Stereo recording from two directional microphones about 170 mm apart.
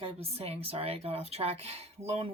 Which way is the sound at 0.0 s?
35° right (ahead or behind).